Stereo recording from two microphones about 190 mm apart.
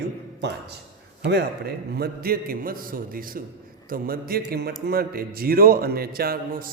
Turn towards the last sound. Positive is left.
turn(degrees=-50)  # may be behind; listen again after turning